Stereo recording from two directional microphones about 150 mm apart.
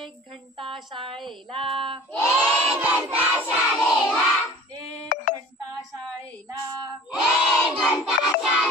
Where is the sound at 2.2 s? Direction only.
10° right (ahead or behind).